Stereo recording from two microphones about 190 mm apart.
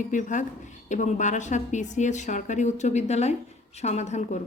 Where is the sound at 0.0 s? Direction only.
40° left (ahead or behind).